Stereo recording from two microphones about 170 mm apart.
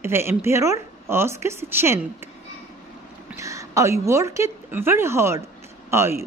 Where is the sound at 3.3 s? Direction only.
20° right (ahead or behind).